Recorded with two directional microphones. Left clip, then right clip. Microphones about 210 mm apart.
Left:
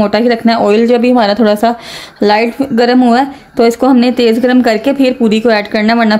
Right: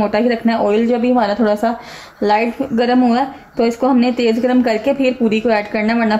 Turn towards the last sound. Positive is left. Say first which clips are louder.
# left 6 dB
turn(degrees=40)  # may be behind; listen again after turning